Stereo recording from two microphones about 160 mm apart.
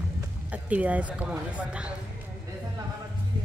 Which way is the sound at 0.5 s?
10° right (ahead or behind).